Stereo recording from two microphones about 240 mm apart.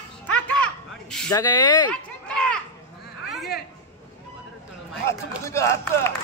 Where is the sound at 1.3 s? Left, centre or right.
Centre.